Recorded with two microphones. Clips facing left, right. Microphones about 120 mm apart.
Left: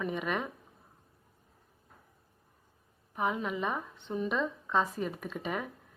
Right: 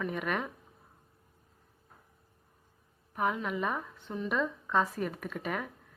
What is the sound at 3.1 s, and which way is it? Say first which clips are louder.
Speech: right 1 dB; 10° left (ahead or behind).